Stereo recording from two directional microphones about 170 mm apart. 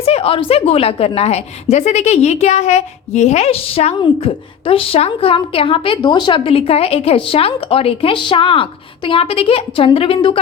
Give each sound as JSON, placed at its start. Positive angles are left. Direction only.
{"t": 0.0, "sound": "a woman's voice", "side_deg": 35}